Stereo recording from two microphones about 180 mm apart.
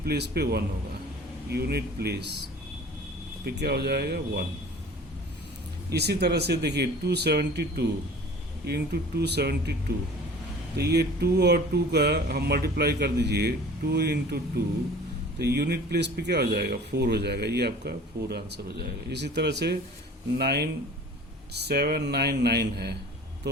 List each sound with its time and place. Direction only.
0.0 s speech: 65° right (ahead or behind)
3.4 s speech: 65° right (ahead or behind)
5.9 s speech: 65° right (ahead or behind)
10.8 s speech: 65° right (ahead or behind)